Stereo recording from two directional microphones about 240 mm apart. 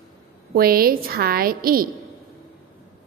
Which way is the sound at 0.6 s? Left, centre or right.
Right.